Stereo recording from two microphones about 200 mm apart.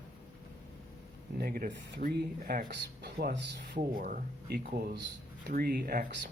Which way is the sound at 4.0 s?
45° right (ahead or behind).